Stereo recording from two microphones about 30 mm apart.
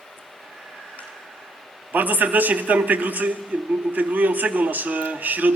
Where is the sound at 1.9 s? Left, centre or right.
Right.